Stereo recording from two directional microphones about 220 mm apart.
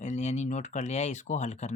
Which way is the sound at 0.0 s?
30° left (ahead or behind).